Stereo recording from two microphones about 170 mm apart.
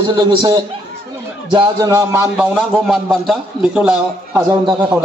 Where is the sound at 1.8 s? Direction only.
15° right (ahead or behind).